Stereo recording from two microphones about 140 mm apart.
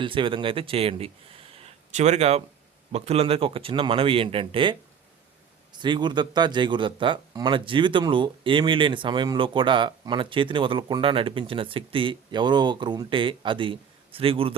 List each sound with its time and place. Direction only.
0.0 s speech: 35° right (ahead or behind)